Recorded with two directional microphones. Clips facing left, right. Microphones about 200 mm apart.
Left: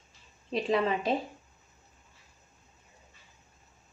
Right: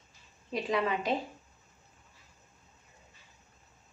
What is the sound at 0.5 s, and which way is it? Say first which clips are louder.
Speech: left 3 dB; 25° left (ahead or behind).